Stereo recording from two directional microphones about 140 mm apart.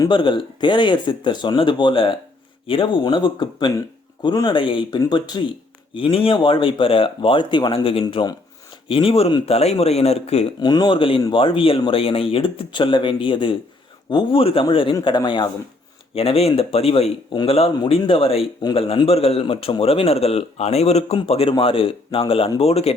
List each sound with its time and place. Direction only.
0.0 s speech: 35° left (ahead or behind)
5.9 s speech: 40° left (ahead or behind)
8.9 s a man's voice: 40° left (ahead or behind)
10.6 s speech: 30° left (ahead or behind)
16.1 s a man's voice: 45° left (ahead or behind)